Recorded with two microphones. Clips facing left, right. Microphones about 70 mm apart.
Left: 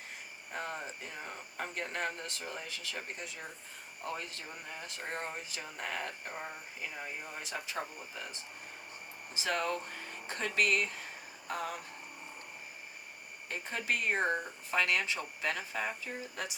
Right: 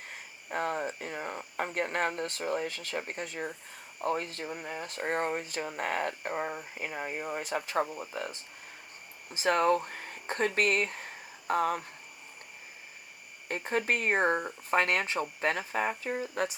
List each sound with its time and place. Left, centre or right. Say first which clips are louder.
0.5 s speech: right 8 dB; right
13.5 s speech: right 6 dB; right